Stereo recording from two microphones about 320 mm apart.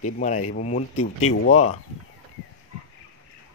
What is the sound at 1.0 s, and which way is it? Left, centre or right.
Speech, left.